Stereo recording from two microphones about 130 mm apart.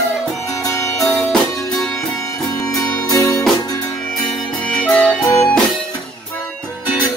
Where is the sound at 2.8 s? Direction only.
25° left (ahead or behind).